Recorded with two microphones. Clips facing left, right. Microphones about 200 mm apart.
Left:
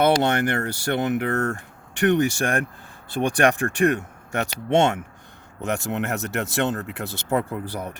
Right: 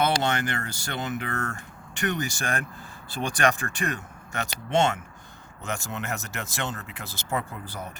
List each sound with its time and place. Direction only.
0.0 s speech: 60° left (ahead or behind)